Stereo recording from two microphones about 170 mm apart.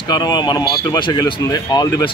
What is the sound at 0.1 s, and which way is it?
Speech, 25° left (ahead or behind).